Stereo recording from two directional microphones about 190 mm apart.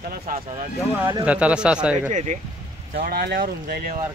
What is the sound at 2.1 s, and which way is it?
Speech, 40° right (ahead or behind).